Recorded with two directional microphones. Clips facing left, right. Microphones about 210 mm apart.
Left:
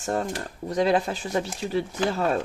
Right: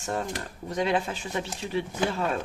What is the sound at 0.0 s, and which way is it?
Speech, 40° left (ahead or behind).